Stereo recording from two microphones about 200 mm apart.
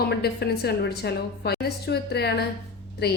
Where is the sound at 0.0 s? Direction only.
55° left (ahead or behind).